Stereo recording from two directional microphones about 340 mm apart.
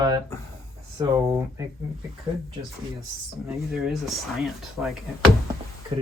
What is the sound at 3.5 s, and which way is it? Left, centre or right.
Speech, centre.